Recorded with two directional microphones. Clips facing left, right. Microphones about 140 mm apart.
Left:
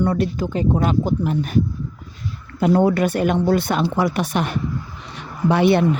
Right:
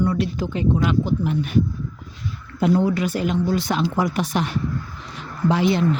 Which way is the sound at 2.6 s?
60° left (ahead or behind).